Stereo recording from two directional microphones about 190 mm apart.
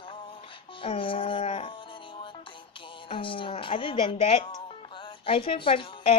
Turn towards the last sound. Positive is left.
turn(degrees=25)  # may be behind; listen again after turning